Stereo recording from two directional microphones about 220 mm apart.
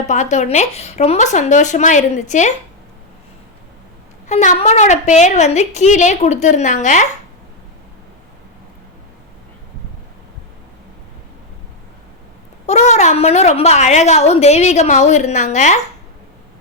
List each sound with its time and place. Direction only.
0.1 s a woman's voice: 30° left (ahead or behind)
4.3 s a woman's voice: 30° left (ahead or behind)
12.6 s a woman's voice: 30° left (ahead or behind)